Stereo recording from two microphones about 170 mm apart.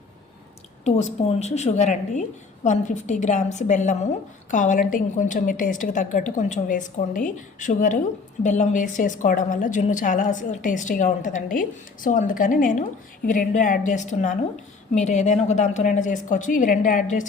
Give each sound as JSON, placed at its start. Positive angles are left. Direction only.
{"t": 0.9, "sound": "a woman's voice", "side_deg": 40}